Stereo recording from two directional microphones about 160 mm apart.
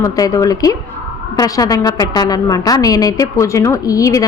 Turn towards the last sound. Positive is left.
turn(degrees=20)  # may be behind; listen again after turning